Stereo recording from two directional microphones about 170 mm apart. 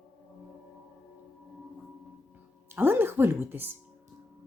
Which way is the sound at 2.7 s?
15° right (ahead or behind).